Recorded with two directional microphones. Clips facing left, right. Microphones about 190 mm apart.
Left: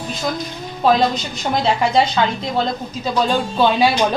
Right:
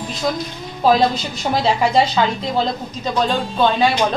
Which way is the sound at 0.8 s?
5° right (ahead or behind).